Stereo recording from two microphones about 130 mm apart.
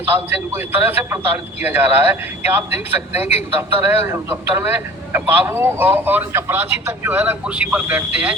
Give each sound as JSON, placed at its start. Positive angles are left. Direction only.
{"t": 0.1, "sound": "a man's voice", "side_deg": -15}